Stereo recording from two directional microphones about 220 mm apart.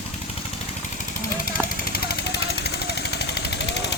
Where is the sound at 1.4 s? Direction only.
45° left (ahead or behind).